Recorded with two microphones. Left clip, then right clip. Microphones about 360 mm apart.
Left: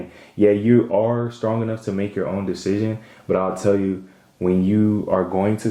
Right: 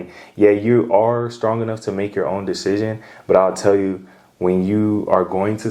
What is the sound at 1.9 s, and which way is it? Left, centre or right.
Speech, right.